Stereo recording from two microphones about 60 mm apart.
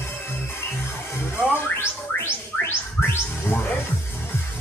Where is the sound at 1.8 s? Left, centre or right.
Left.